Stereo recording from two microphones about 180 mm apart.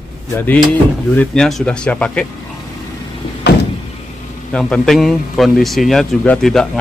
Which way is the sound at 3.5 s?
65° left (ahead or behind).